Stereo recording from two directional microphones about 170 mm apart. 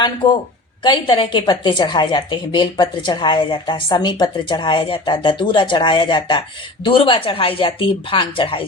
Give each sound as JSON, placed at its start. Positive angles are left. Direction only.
{"t": 0.8, "sound": "a woman's voice", "side_deg": 30}